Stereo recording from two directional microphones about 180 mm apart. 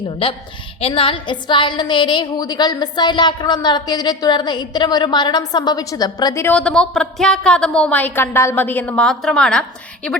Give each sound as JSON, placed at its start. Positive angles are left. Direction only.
{"t": 0.2, "sound": "a woman's voice", "side_deg": 30}